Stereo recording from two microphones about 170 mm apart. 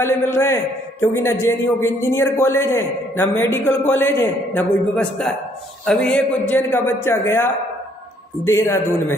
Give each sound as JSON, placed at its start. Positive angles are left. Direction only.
{"t": 0.0, "sound": "a man's voice", "side_deg": 15}